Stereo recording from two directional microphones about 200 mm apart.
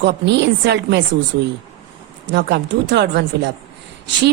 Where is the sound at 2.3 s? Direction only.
60° right (ahead or behind).